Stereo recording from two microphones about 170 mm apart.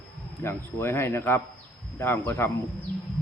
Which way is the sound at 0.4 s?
15° left (ahead or behind).